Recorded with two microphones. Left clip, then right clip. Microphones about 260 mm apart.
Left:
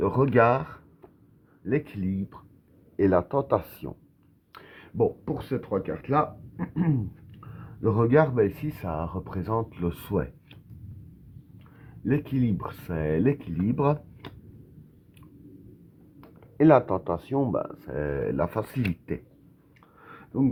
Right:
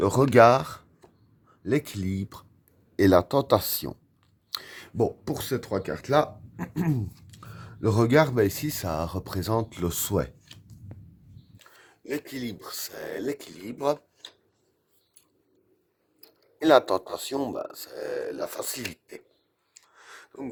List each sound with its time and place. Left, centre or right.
0.0 s speech: right
11.6 s speech: right
16.6 s speech: right
20.0 s a sound: right